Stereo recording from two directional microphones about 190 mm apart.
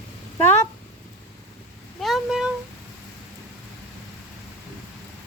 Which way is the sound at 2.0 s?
Centre (ahead or behind).